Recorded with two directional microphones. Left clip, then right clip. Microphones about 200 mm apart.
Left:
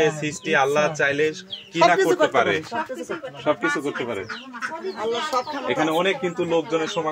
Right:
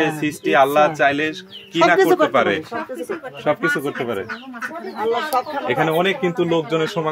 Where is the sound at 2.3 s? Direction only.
40° right (ahead or behind).